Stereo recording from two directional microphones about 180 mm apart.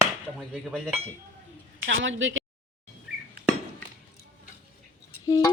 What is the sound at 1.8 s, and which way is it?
Speech, 90° right.